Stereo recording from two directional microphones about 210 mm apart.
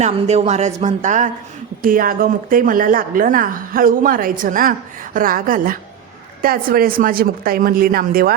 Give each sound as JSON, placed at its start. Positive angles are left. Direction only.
{"t": 0.0, "sound": "a woman's voice", "side_deg": -30}